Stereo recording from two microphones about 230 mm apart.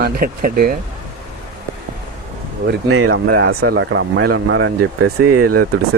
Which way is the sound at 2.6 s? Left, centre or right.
Right.